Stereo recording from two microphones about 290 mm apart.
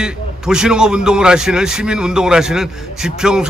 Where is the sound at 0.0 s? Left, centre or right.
Centre.